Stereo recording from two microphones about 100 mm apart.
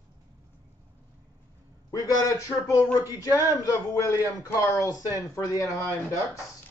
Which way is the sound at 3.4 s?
30° left (ahead or behind).